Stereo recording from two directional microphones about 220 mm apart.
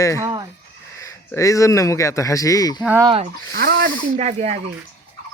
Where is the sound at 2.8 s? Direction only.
10° right (ahead or behind).